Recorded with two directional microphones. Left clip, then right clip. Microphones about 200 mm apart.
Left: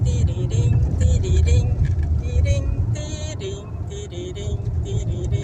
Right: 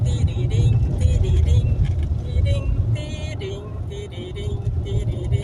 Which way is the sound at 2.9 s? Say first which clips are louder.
Left 1 dB; 15° left (ahead or behind).